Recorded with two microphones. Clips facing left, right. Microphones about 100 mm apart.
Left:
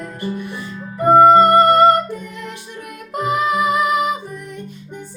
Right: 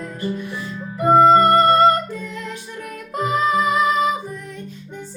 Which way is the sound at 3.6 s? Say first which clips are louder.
Left 1 dB; 15° left (ahead or behind).